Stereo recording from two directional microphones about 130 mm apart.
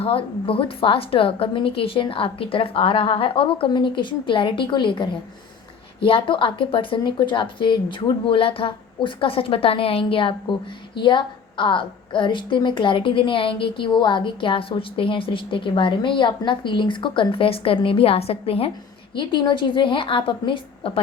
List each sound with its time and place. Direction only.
0.0 s a woman's voice: 45° left (ahead or behind)